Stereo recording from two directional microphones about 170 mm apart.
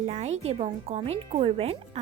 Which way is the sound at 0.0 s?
40° right (ahead or behind).